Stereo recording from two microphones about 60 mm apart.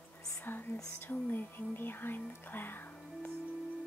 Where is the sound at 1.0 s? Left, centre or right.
Left.